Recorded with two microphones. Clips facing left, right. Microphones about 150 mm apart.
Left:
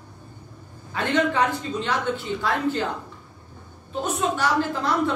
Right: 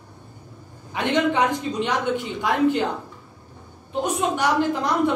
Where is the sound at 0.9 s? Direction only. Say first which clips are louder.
Right 1 dB; 15° right (ahead or behind).